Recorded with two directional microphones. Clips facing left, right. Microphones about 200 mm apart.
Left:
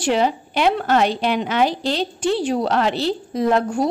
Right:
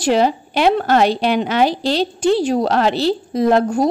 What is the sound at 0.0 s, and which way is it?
A woman's voice, 35° right (ahead or behind).